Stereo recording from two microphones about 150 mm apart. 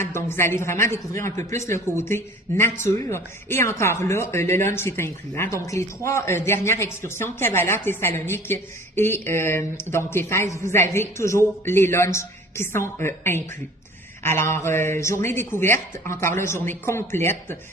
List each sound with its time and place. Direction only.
0.0 s speech: 15° left (ahead or behind)